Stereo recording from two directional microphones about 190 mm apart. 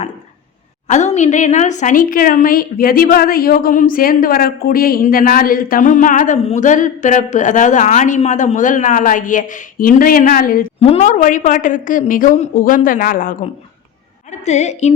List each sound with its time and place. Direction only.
0.9 s a woman's voice: 35° left (ahead or behind)
10.8 s a woman's voice: 35° left (ahead or behind)